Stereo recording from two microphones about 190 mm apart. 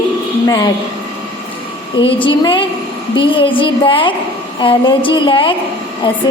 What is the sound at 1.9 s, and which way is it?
Music, 25° left (ahead or behind).